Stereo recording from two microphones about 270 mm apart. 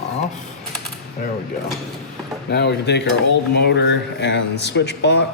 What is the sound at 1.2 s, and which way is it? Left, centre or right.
Speech, left.